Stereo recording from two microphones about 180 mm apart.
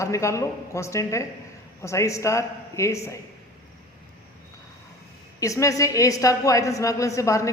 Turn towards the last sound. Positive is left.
turn(degrees=15)  # may be behind; listen again after turning